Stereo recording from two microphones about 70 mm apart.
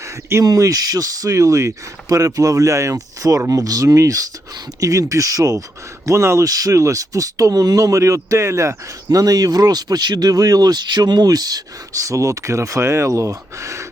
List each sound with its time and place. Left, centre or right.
0.4 s speech: right
9.0 s speech: right